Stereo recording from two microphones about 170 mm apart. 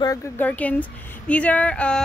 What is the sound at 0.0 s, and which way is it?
Speech, 20° left (ahead or behind).